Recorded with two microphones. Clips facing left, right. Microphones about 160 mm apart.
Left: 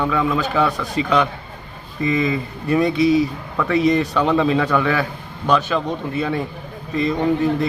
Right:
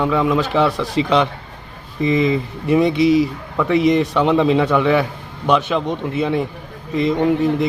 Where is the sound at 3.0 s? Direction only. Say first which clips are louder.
Even; 75° right (ahead or behind).